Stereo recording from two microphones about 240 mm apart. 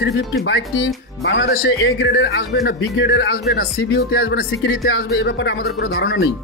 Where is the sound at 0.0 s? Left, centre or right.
Left.